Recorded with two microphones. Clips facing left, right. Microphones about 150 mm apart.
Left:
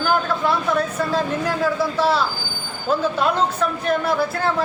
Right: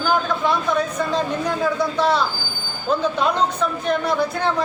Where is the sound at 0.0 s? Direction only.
5° left (ahead or behind).